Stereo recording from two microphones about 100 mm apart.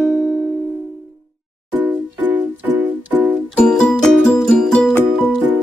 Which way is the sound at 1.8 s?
20° right (ahead or behind).